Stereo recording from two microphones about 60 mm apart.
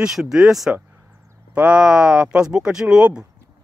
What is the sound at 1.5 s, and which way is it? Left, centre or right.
Speech, centre.